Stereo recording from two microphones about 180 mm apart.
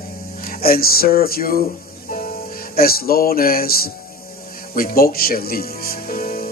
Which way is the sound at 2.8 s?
55° left (ahead or behind).